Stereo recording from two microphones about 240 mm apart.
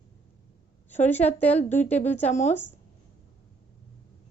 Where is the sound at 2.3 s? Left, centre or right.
Left.